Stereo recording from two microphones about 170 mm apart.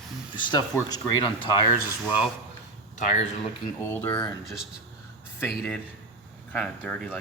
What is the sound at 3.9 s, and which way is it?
Speech, 10° left (ahead or behind).